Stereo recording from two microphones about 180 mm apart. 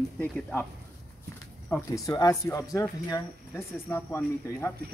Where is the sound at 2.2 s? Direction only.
15° left (ahead or behind).